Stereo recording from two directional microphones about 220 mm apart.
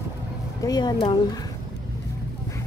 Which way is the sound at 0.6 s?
20° left (ahead or behind).